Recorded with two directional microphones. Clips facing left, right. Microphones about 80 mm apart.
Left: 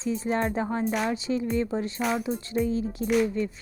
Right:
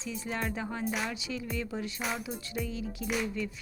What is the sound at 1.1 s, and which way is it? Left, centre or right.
Speech, left.